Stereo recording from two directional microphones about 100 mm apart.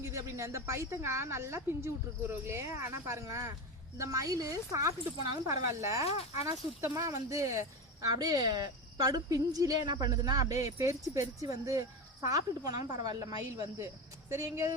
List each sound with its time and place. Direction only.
0.0 s a woman's voice: 30° right (ahead or behind)
6.1 s speech: 90° left
6.8 s a woman's voice: 30° right (ahead or behind)
8.0 s a woman's voice: 40° right (ahead or behind)
14.3 s a woman's voice: 30° right (ahead or behind)